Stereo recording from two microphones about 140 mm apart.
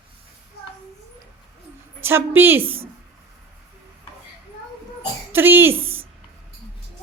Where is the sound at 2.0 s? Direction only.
15° right (ahead or behind).